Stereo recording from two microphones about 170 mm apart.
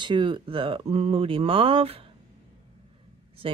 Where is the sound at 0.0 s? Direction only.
30° right (ahead or behind).